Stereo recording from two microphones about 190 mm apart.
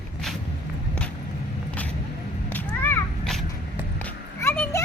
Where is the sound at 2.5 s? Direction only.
10° left (ahead or behind).